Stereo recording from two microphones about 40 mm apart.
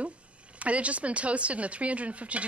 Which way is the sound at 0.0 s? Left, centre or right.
Right.